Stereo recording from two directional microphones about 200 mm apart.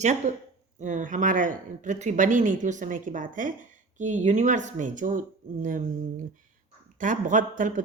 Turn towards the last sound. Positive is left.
turn(degrees=-40)  # may be behind; listen again after turning